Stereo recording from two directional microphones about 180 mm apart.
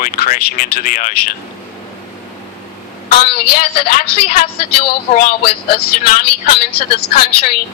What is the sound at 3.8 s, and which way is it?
A woman's voice, 55° left (ahead or behind).